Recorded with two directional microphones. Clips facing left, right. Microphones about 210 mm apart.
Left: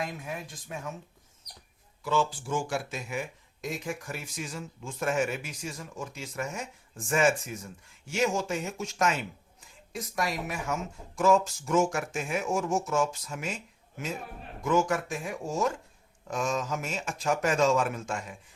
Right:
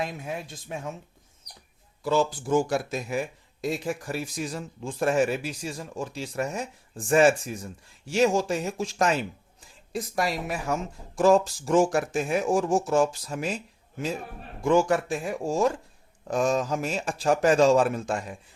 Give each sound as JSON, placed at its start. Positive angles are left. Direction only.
{"t": 0.2, "sound": "speech", "side_deg": -30}
{"t": 2.0, "sound": "speech", "side_deg": -40}
{"t": 14.6, "sound": "speech", "side_deg": -30}